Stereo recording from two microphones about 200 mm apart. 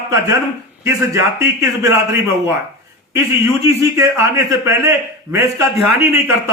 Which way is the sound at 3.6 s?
15° right (ahead or behind).